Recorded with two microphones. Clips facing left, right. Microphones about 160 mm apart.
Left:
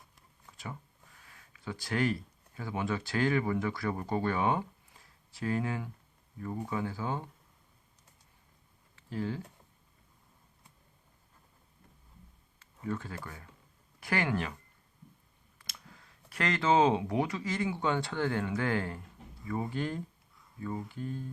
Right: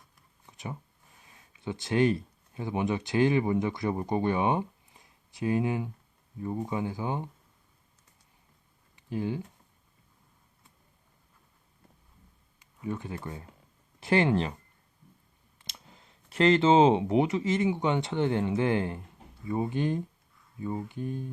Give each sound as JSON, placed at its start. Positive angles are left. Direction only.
{"t": 0.4, "sound": "speech", "side_deg": -20}
{"t": 9.0, "sound": "a sound", "side_deg": -15}
{"t": 12.5, "sound": "speech", "side_deg": -15}
{"t": 15.5, "sound": "speech", "side_deg": -25}